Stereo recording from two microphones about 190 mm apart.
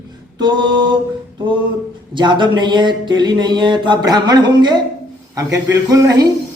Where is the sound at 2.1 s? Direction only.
25° right (ahead or behind).